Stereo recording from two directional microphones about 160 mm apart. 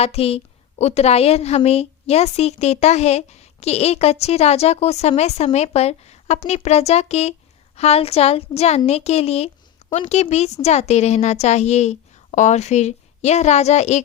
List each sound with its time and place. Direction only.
0.0 s a woman's voice: 40° left (ahead or behind)